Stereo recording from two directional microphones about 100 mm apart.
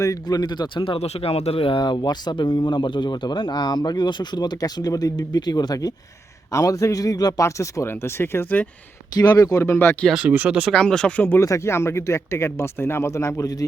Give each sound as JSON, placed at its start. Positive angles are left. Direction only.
{"t": 0.0, "sound": "speech", "side_deg": 40}
{"t": 0.9, "sound": "speech", "side_deg": 90}
{"t": 9.1, "sound": "speech", "side_deg": 40}
{"t": 10.1, "sound": "speech", "side_deg": -10}
{"t": 10.7, "sound": "speech", "side_deg": 10}
{"t": 11.3, "sound": "speech", "side_deg": 30}